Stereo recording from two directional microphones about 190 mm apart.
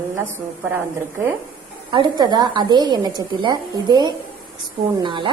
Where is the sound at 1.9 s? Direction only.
20° right (ahead or behind).